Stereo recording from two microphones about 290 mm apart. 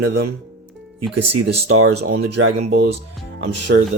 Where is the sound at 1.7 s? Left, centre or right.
Right.